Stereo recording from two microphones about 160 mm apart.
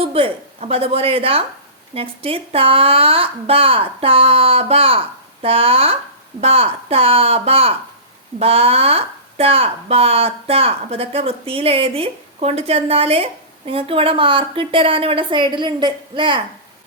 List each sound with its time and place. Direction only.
0.0 s a woman's voice: 35° right (ahead or behind)